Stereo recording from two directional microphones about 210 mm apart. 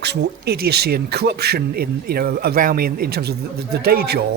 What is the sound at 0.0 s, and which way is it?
Speech, 50° right (ahead or behind).